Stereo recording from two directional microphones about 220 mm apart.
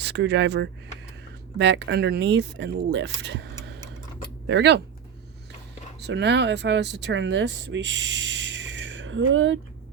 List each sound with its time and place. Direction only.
0.0 s speech: 50° right (ahead or behind)
6.0 s speech: 50° right (ahead or behind)